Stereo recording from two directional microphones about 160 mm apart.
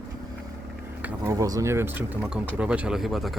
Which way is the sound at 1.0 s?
20° right (ahead or behind).